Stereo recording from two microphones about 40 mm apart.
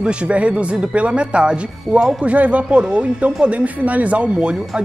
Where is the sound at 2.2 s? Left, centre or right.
Right.